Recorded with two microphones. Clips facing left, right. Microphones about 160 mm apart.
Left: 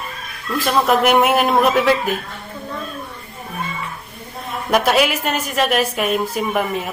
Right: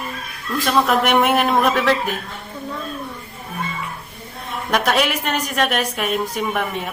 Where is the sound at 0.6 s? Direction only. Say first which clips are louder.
Left 2 dB; 5° left (ahead or behind).